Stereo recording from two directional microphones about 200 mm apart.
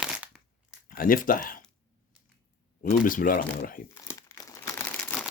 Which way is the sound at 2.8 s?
45° left (ahead or behind).